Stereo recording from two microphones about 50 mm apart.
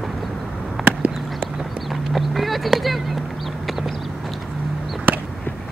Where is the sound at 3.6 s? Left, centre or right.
Centre.